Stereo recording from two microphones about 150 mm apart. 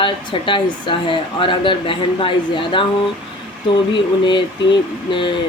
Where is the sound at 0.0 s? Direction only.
35° left (ahead or behind).